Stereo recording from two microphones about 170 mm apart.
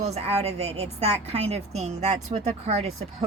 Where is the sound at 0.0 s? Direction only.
40° right (ahead or behind).